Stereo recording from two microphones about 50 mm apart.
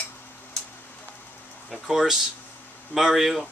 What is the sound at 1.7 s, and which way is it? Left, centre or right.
Speech, centre.